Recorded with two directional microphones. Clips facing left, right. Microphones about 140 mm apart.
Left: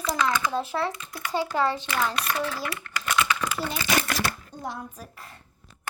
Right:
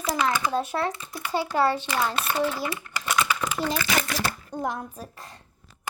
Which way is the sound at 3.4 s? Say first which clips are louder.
Right 1 dB; 20° right (ahead or behind).